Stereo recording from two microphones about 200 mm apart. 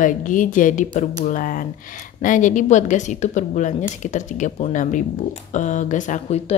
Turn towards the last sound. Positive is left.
turn(degrees=35)  # may be behind; listen again after turning